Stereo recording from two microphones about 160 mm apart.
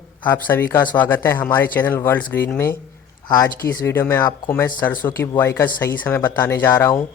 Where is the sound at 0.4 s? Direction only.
15° left (ahead or behind).